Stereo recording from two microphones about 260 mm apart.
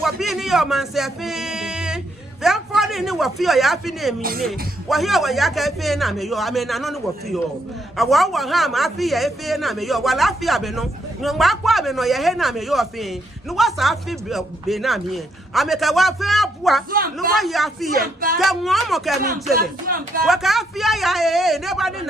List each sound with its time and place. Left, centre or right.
0.0 s music: centre
2.4 s a man's voice: centre
18.0 s speech: right
18.3 s speech: centre
19.2 s speech: right
20.2 s speech: centre